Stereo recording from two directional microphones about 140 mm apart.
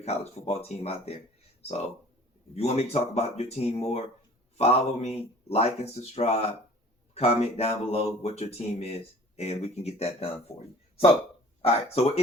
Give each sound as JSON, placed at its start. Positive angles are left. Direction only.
{"t": 0.0, "sound": "speech", "side_deg": 50}